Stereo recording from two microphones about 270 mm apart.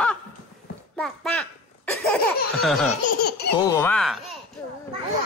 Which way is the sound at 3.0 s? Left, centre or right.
Left.